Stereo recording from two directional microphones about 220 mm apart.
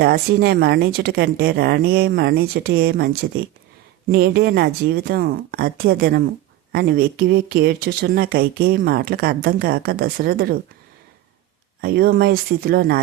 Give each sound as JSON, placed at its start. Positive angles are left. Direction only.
{"t": 0.0, "sound": "speech", "side_deg": -45}
{"t": 11.8, "sound": "speech", "side_deg": -45}